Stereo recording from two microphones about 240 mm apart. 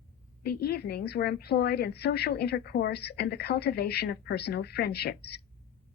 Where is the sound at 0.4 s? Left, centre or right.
Left.